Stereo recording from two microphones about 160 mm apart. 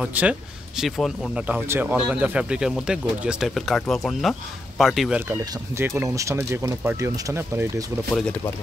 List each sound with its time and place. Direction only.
0.0 s speech: 10° right (ahead or behind)
5.4 s speech: 15° right (ahead or behind)
8.1 s speech: 10° left (ahead or behind)